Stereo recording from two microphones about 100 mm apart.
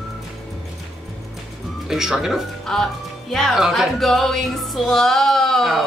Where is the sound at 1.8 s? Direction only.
5° right (ahead or behind).